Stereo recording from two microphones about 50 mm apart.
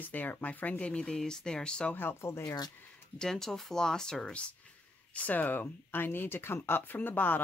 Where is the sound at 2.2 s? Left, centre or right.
Left.